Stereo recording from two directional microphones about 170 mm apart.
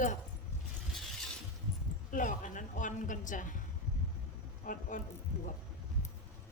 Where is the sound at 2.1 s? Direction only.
50° left (ahead or behind).